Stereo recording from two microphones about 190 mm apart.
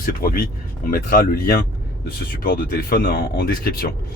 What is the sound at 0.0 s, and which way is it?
Speech, 50° left (ahead or behind).